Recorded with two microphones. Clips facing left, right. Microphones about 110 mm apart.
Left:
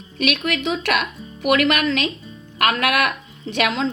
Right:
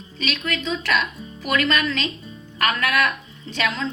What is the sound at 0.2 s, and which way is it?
A woman's voice, 70° left (ahead or behind).